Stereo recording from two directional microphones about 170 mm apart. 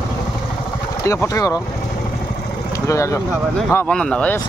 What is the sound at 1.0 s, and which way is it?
Speech, 15° left (ahead or behind).